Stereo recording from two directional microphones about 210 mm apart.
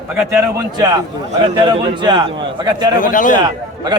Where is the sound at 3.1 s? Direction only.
40° left (ahead or behind).